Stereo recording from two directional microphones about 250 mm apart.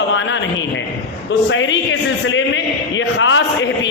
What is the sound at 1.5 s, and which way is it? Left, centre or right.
A man's voice, left.